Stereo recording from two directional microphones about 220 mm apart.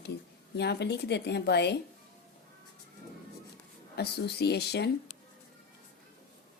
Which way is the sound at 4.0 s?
50° left (ahead or behind).